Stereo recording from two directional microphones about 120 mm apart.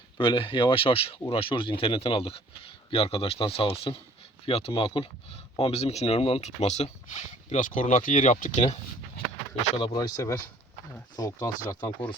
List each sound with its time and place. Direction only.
0.2 s speech: 45° left (ahead or behind)
4.7 s speech: 40° left (ahead or behind)
5.5 s speech: 55° left (ahead or behind); by 8.8 s 80° left
9.7 s speech: 35° left (ahead or behind)